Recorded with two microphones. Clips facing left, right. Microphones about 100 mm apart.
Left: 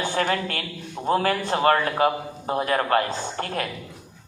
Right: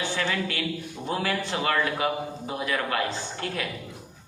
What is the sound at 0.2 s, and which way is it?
A man's voice, 45° left (ahead or behind).